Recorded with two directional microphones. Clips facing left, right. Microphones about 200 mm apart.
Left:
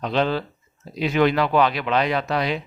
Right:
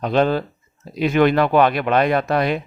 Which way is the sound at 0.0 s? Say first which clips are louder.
Right 4 dB; 50° right (ahead or behind).